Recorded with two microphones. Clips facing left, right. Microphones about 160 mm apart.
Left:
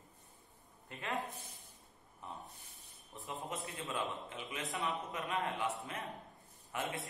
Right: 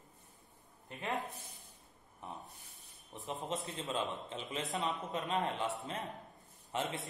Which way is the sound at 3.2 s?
25° right (ahead or behind).